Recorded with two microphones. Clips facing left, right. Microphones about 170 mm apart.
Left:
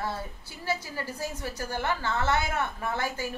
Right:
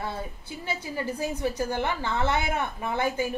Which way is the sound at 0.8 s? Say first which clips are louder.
Right 5 dB; 20° right (ahead or behind).